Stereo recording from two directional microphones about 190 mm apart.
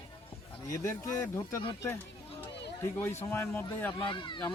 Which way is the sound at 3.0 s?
15° left (ahead or behind).